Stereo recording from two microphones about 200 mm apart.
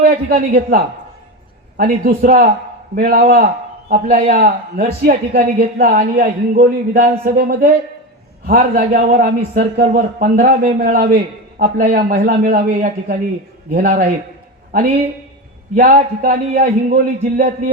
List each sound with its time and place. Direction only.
0.0 s a man's voice: 50° right (ahead or behind)
2.0 s a man's voice: 45° right (ahead or behind)
15.7 s a man's voice: 45° right (ahead or behind)